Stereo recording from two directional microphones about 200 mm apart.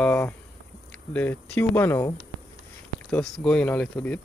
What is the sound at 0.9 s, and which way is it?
Speech, 10° left (ahead or behind).